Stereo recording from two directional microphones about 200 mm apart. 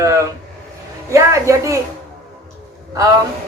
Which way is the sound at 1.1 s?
15° right (ahead or behind).